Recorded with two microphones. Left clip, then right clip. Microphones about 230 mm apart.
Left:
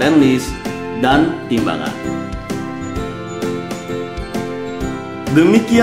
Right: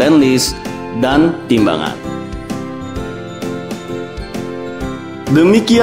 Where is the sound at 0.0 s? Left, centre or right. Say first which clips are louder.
Right 2 dB; right.